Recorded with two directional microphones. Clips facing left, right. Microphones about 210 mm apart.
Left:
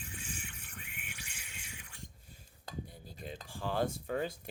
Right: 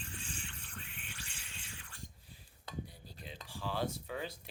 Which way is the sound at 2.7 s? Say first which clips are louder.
Left 1 dB; 50° left (ahead or behind).